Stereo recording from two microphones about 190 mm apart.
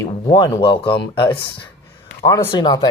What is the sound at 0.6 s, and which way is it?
Speech, 25° left (ahead or behind).